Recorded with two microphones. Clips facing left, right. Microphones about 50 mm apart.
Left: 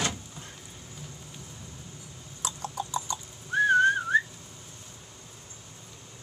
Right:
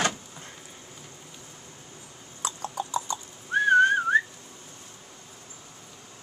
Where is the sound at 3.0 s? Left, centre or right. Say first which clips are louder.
Right 2 dB; right.